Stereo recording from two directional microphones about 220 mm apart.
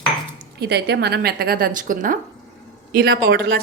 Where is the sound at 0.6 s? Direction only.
50° right (ahead or behind).